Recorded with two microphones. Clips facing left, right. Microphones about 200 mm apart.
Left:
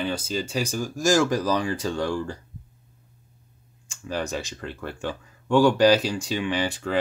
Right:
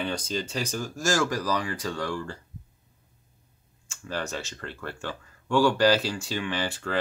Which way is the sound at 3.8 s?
15° left (ahead or behind).